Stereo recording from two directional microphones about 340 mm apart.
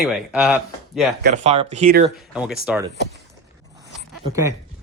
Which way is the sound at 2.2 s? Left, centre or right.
Centre.